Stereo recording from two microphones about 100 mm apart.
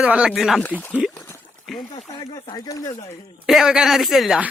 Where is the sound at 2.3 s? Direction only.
40° left (ahead or behind).